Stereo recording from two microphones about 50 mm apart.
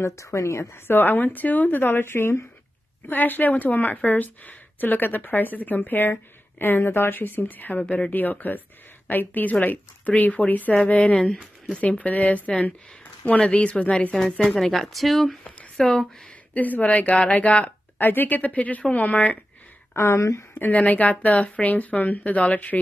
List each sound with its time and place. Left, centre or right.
0.0 s a woman's voice: left
0.8 s speech: left
3.1 s speech: left
14.6 s a woman's voice: centre
15.8 s speech: centre
16.5 s speech: left
17.9 s speech: left
20.0 s speech: left
20.7 s speech: left